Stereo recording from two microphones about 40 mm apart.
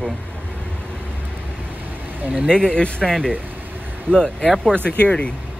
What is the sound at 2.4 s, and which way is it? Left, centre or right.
Speech, left.